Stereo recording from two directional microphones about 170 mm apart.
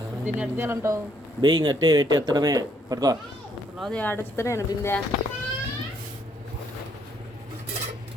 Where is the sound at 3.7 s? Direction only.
Centre (ahead or behind).